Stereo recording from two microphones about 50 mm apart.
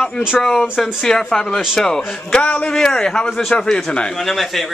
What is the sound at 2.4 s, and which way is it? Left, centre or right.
Speech, left.